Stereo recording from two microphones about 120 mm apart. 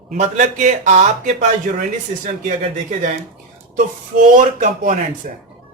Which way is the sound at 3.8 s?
90° right.